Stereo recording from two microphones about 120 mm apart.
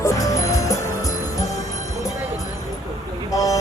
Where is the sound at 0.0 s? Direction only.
30° left (ahead or behind).